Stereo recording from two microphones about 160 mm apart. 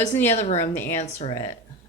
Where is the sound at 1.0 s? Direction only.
40° left (ahead or behind).